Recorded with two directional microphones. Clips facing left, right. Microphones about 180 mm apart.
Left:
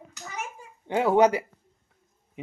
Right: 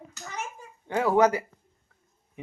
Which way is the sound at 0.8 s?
25° left (ahead or behind).